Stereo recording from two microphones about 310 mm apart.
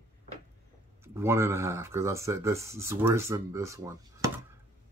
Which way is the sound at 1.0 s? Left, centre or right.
Centre.